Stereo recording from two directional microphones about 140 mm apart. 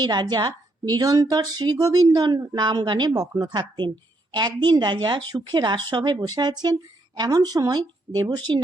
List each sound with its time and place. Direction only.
0.0 s a woman's voice: 30° right (ahead or behind)